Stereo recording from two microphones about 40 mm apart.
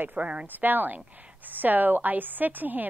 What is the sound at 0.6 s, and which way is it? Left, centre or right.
Speech, right.